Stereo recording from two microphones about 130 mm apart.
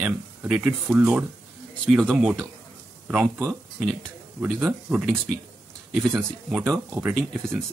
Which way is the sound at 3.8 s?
5° right (ahead or behind).